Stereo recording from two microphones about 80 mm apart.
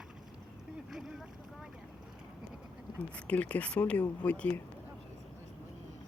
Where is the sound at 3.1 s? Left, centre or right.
Centre.